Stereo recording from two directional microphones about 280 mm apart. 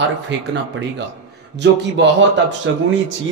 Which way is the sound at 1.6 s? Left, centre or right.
Right.